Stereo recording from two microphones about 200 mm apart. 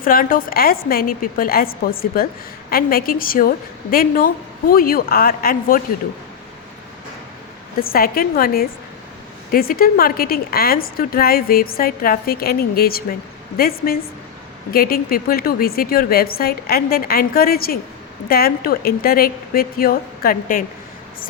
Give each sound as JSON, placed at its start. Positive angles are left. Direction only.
{"t": 0.0, "sound": "a woman's voice", "side_deg": 45}
{"t": 7.8, "sound": "a woman's voice", "side_deg": 45}